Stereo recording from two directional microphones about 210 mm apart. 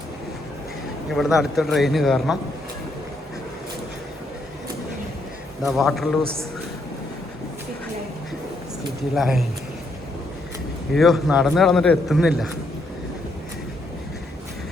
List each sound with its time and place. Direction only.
1.1 s a man's voice: centre (ahead or behind)
5.6 s a man's voice: centre (ahead or behind)
9.1 s a man's voice: centre (ahead or behind)
10.9 s a man's voice: centre (ahead or behind)